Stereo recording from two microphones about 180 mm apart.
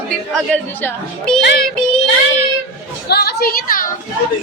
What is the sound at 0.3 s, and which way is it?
A woman's voice, 10° left (ahead or behind).